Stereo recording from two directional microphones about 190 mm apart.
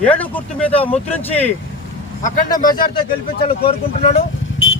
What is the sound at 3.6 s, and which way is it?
Speech, 35° left (ahead or behind).